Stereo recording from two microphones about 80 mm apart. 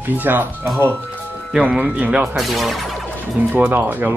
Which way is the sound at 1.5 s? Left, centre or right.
Centre.